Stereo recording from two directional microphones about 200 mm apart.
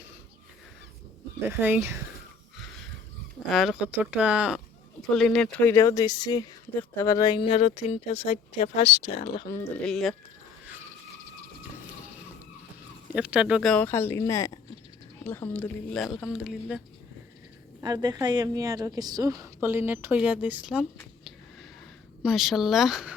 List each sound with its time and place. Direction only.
1.5 s a woman's voice: 10° right (ahead or behind)
3.5 s speech: centre (ahead or behind); by 9.5 s 30° left (ahead or behind)
9.5 s speech: 10° left (ahead or behind)
9.8 s speech: centre (ahead or behind)
13.1 s speech: 5° right (ahead or behind)
17.7 s a woman's voice: 20° right (ahead or behind)
22.2 s speech: centre (ahead or behind)